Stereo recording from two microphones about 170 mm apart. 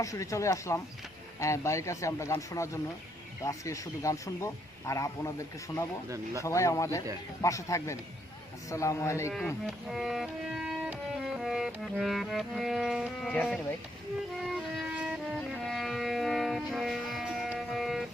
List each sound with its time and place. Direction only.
0.0 s speech: 20° left (ahead or behind)
9.6 s music: centre (ahead or behind)